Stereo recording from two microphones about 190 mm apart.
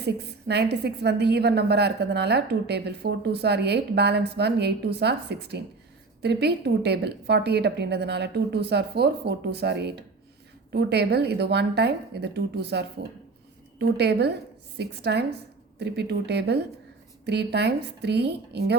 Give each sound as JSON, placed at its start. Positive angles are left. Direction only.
{"t": 0.0, "sound": "a woman's voice", "side_deg": -60}